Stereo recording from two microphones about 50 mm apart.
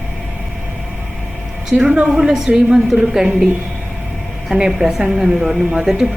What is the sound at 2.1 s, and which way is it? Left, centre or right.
Speech, centre.